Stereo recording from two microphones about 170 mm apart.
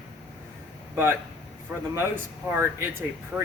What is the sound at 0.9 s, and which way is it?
A man's voice, 15° right (ahead or behind).